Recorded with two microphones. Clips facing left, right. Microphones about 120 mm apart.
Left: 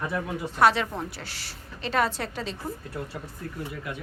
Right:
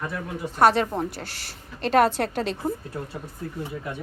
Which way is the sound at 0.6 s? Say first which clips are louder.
Right 3 dB; 45° right (ahead or behind).